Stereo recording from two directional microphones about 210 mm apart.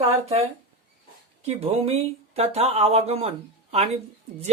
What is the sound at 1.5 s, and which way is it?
Speech, 30° right (ahead or behind).